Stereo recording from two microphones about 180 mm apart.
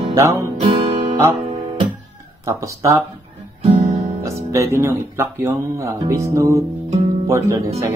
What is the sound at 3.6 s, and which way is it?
Guitar, 40° right (ahead or behind).